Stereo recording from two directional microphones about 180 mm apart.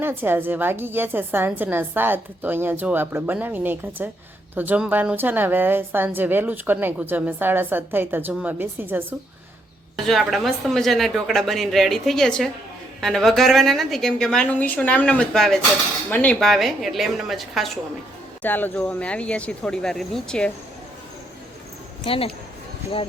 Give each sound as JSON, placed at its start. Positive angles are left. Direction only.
{"t": 0.0, "sound": "a woman's voice", "side_deg": -10}
{"t": 10.1, "sound": "a woman's voice", "side_deg": 0}
{"t": 18.4, "sound": "speech", "side_deg": 10}
{"t": 22.0, "sound": "speech", "side_deg": 30}